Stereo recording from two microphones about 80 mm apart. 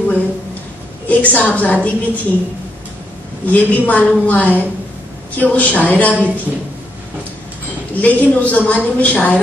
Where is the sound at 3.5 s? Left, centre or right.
Centre.